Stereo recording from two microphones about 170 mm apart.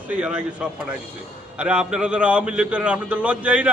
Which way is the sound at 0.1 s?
5° right (ahead or behind).